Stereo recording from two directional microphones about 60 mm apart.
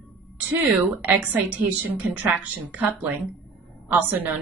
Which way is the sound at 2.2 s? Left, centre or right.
Right.